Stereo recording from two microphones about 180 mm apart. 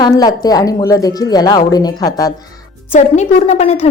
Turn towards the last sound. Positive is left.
turn(degrees=35)  # may be behind; listen again after turning